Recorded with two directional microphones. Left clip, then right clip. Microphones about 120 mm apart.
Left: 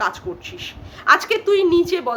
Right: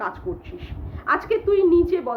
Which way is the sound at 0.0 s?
20° left (ahead or behind).